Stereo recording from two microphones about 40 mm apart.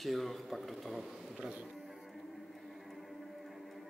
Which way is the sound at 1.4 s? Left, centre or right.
Right.